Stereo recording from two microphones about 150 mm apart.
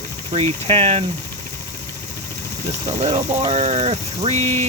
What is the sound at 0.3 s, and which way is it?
Speech, 45° right (ahead or behind).